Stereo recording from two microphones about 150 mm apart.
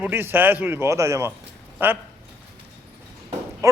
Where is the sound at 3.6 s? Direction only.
20° right (ahead or behind).